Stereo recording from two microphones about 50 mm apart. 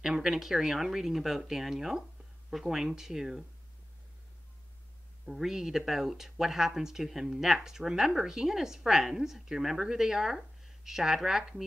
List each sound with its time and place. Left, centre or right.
0.0 s speech: centre
5.2 s speech: centre